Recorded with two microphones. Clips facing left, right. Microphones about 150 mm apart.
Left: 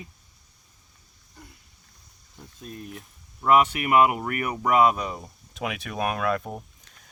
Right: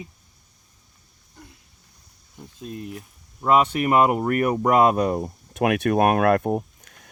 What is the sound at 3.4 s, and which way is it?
Speech, 30° right (ahead or behind).